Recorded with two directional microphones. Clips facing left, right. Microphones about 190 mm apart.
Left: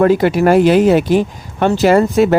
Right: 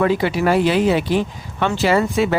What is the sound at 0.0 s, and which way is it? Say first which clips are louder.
Speech: left 6 dB; 45° left (ahead or behind).